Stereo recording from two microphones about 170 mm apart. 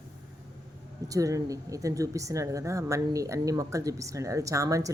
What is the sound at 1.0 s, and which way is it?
Speech, 20° right (ahead or behind).